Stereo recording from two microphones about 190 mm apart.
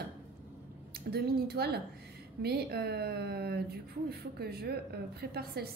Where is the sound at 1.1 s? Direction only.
55° right (ahead or behind).